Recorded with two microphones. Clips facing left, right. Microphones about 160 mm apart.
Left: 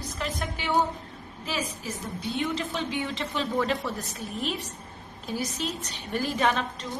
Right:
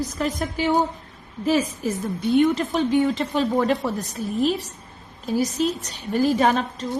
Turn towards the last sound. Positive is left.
turn(degrees=-40)  # may be behind; listen again after turning